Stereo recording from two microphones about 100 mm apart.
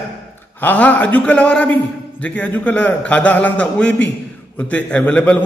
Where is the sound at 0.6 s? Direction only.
20° left (ahead or behind).